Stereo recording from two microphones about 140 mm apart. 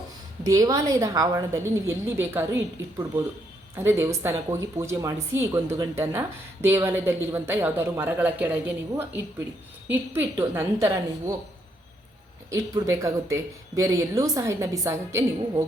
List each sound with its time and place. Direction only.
0.4 s speech: 25° right (ahead or behind)
3.8 s a woman's voice: 15° right (ahead or behind)
12.5 s speech: 25° right (ahead or behind)